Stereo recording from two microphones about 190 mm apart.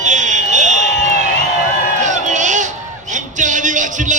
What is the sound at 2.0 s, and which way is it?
Crowd, 40° right (ahead or behind).